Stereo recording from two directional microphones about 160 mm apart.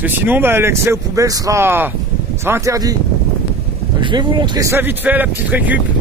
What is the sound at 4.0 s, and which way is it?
Speech, 30° right (ahead or behind).